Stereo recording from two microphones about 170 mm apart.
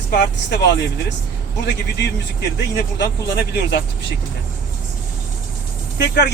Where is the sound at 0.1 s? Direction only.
90° left.